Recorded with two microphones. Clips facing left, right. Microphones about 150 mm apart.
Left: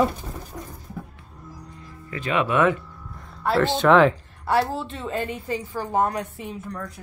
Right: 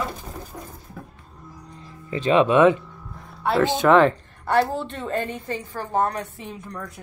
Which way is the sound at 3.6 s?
10° right (ahead or behind).